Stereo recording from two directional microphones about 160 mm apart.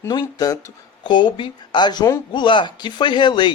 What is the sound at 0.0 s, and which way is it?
Speech, 25° left (ahead or behind).